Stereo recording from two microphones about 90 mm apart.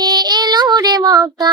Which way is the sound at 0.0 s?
50° right (ahead or behind).